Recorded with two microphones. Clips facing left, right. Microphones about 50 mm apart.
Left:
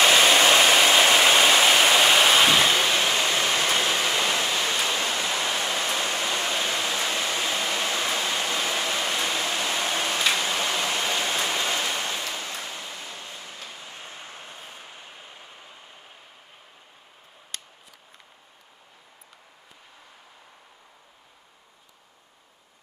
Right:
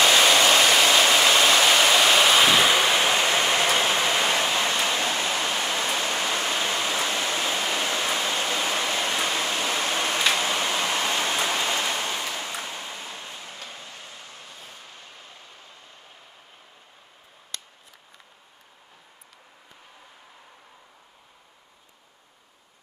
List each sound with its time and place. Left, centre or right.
0.0 s waterfall: centre
5.2 s pink noise: centre
6.1 s pink noise: centre
6.5 s waterfall: centre
9.0 s a sound: centre
10.4 s tick-tock: centre
11.1 s rain: centre
12.3 s a sound: centre
13.6 s vehicle: centre
13.9 s vehicle: left